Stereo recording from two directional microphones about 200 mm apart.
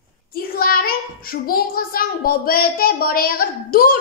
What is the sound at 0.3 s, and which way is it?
A child's voice, 45° left (ahead or behind).